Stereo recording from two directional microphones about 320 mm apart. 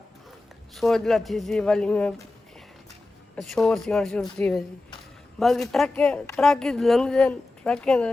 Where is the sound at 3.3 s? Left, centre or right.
Centre.